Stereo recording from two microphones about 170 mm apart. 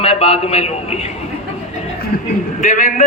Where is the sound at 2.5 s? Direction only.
50° left (ahead or behind).